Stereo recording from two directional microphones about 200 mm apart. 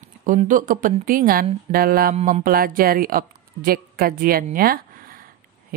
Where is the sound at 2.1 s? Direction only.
35° right (ahead or behind).